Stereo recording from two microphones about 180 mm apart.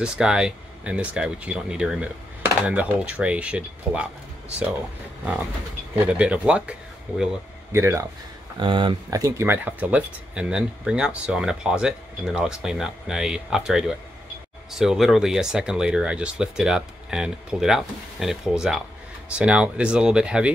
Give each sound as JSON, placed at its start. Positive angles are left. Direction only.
{"t": 0.0, "sound": "speech", "side_deg": -5}
{"t": 5.2, "sound": "speech", "side_deg": -5}
{"t": 7.7, "sound": "speech", "side_deg": -15}
{"t": 8.5, "sound": "speech", "side_deg": -25}